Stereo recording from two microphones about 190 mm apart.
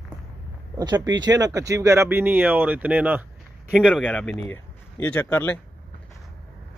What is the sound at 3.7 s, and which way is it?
Speech, 5° left (ahead or behind).